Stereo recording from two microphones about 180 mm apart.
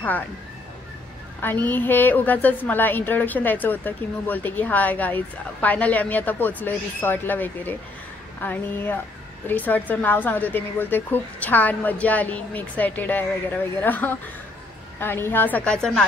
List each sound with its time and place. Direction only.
1.4 s a woman's voice: 10° left (ahead or behind)